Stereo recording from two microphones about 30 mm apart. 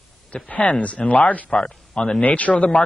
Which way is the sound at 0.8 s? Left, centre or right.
Left.